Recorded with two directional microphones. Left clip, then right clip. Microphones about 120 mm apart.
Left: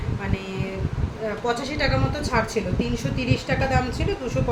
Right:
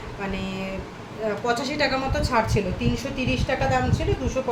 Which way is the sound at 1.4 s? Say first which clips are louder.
Even; 30° right (ahead or behind).